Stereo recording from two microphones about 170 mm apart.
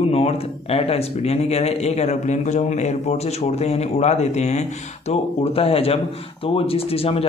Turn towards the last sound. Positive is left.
turn(degrees=35)  # may be behind; listen again after turning